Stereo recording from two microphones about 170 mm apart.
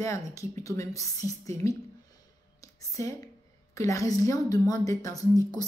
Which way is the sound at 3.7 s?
20° left (ahead or behind).